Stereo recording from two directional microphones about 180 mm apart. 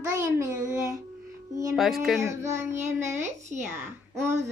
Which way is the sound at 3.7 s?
15° right (ahead or behind).